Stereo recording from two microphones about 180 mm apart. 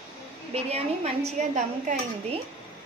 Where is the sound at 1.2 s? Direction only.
40° right (ahead or behind).